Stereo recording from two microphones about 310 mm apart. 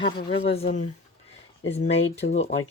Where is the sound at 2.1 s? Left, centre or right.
Centre.